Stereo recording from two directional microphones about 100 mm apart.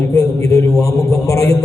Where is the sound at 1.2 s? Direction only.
30° left (ahead or behind).